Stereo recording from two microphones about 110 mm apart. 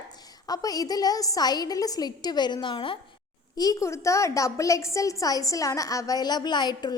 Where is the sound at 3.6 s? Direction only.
30° left (ahead or behind).